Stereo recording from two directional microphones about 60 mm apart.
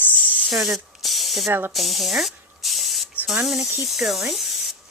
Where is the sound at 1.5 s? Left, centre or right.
Right.